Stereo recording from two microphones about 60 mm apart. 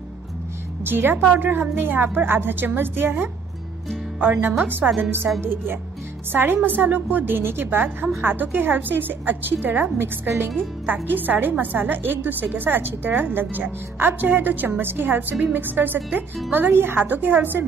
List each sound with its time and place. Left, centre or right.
0.8 s a woman's voice: right
4.8 s a woman's voice: centre
5.4 s a woman's voice: right